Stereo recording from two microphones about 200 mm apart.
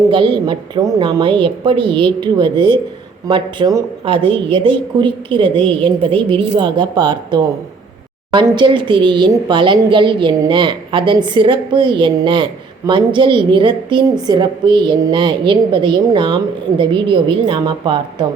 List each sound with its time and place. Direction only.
0.1 s a woman's voice: 25° right (ahead or behind)